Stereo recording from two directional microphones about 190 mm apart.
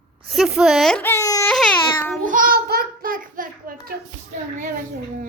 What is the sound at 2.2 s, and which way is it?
Child singing, 45° right (ahead or behind).